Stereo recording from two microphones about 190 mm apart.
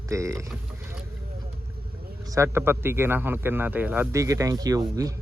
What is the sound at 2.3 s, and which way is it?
A man's voice, 15° right (ahead or behind).